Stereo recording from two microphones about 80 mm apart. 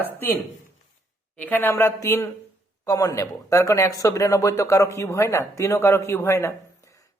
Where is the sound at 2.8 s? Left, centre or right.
Left.